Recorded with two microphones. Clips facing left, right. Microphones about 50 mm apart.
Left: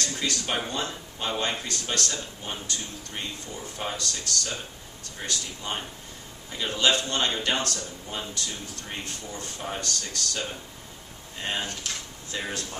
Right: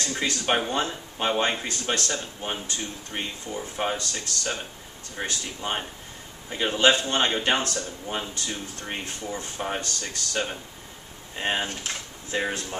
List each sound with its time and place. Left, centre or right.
0.1 s a man's voice: right